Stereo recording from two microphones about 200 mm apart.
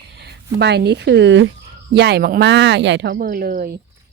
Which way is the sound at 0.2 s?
55° right (ahead or behind).